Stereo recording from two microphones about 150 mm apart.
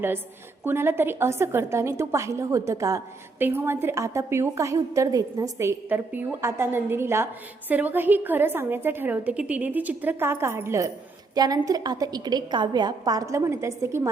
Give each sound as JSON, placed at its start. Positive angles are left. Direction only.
{"t": 0.6, "sound": "a woman's voice", "side_deg": -15}